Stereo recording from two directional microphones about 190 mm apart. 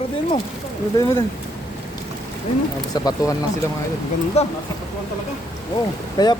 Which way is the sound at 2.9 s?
20° left (ahead or behind).